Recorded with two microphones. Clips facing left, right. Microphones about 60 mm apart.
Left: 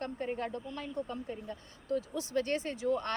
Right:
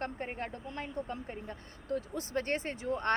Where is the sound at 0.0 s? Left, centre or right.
Right.